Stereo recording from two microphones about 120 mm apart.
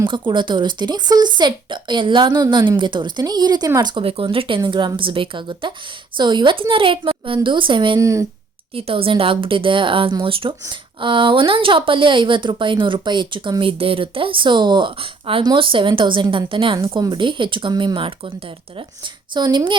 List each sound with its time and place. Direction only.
0.1 s speech: 40° right (ahead or behind)
3.8 s a woman's voice: 45° right (ahead or behind)
7.9 s speech: 25° right (ahead or behind)
8.7 s a woman's voice: 50° right (ahead or behind)